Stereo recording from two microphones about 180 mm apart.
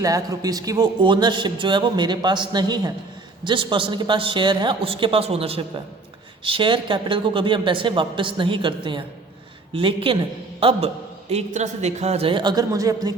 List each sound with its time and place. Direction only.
0.0 s a man's voice: 20° right (ahead or behind)